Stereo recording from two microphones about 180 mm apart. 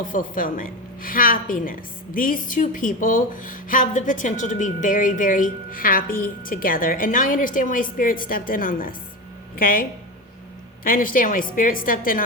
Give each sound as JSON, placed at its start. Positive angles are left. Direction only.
{"t": 0.0, "sound": "a woman's voice", "side_deg": 50}
{"t": 10.8, "sound": "a woman's voice", "side_deg": 50}